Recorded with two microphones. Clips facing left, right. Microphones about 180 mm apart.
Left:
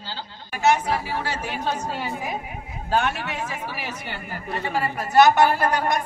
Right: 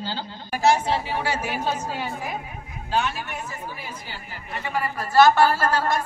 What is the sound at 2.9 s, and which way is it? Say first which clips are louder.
Speech: left 2 dB; 65° left (ahead or behind).